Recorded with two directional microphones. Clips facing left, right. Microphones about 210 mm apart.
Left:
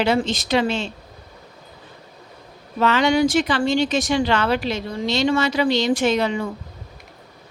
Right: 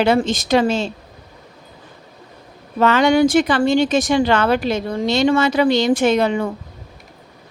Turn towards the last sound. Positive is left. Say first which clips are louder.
# right 4 dB
turn(degrees=-55)  # may be behind; listen again after turning